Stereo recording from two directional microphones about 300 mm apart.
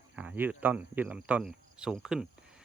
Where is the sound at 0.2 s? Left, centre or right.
Centre.